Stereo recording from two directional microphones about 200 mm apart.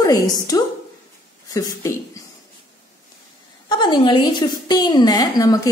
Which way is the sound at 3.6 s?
25° left (ahead or behind).